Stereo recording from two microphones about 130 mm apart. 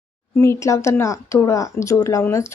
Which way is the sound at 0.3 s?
20° left (ahead or behind).